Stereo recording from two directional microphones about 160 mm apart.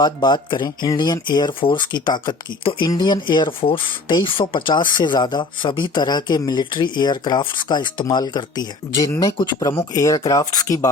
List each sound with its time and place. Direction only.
0.0 s speech: 30° left (ahead or behind)